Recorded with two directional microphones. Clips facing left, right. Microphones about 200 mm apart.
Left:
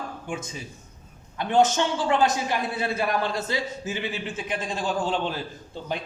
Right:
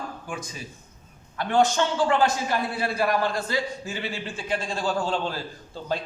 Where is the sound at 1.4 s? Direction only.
20° left (ahead or behind).